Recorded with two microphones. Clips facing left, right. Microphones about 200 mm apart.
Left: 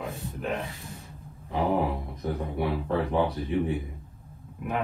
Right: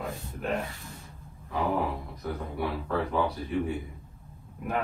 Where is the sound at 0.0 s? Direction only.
Centre (ahead or behind).